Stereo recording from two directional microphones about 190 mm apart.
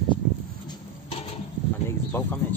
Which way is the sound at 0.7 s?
30° left (ahead or behind).